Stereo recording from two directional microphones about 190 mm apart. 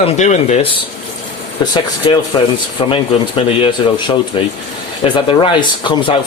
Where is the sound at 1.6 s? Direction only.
20° left (ahead or behind).